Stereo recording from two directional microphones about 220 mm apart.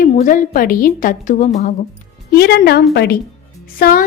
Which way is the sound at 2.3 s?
45° left (ahead or behind).